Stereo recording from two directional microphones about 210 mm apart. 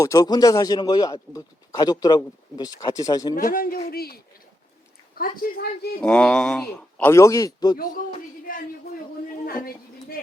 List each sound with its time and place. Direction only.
0.0 s a man's voice: 15° left (ahead or behind)
3.3 s a man's voice: 40° left (ahead or behind)
5.4 s a man's voice: 45° left (ahead or behind)
6.0 s a man's voice: 5° left (ahead or behind)
9.5 s a woman's voice: 45° left (ahead or behind)